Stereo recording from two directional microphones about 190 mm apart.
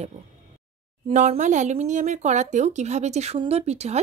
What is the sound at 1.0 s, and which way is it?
Speech, 35° right (ahead or behind).